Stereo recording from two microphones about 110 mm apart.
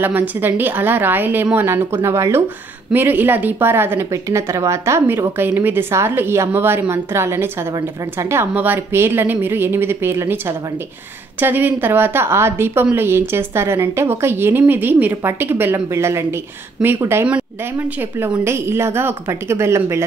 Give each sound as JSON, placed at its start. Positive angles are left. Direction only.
{"t": 0.0, "sound": "a woman's voice", "side_deg": -15}
{"t": 11.4, "sound": "a woman's voice", "side_deg": -15}
{"t": 18.4, "sound": "a woman's voice", "side_deg": -25}